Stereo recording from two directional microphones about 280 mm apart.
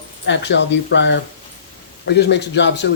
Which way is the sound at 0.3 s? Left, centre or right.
Left.